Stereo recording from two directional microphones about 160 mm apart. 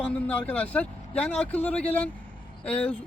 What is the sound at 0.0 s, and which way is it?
Speech, 10° left (ahead or behind).